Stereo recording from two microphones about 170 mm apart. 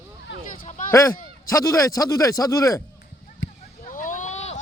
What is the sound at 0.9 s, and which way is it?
Speech, 15° left (ahead or behind).